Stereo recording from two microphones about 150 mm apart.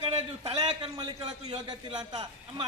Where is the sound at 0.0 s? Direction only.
40° right (ahead or behind).